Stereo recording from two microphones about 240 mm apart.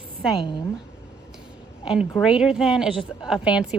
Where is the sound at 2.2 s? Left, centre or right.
Centre.